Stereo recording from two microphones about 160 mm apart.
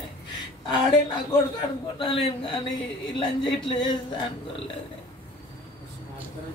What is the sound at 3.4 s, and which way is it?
Speech, 30° left (ahead or behind).